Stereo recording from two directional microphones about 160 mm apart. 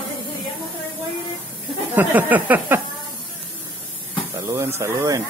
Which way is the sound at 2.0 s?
10° right (ahead or behind).